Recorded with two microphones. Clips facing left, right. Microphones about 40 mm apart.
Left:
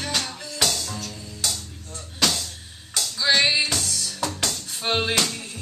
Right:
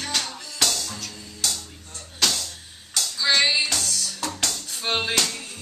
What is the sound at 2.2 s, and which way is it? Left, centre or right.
Music, centre.